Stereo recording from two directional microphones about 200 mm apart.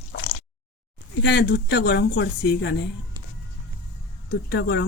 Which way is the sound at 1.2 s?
55° left (ahead or behind).